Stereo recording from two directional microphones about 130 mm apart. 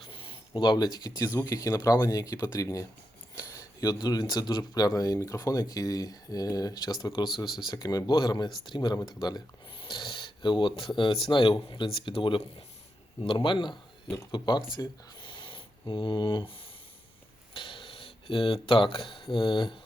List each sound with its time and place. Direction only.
0.0 s a sound: 45° left (ahead or behind)
1.4 s speech: 25° left (ahead or behind)
7.4 s speech: centre (ahead or behind)
7.7 s speech: 30° left (ahead or behind)
14.8 s a sound: 35° left (ahead or behind)
17.5 s speech: 40° left (ahead or behind)